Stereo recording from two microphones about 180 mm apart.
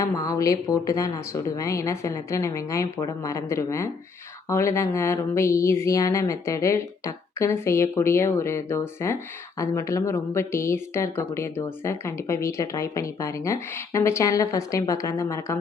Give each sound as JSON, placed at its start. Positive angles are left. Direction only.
{"t": 0.0, "sound": "speech", "side_deg": 20}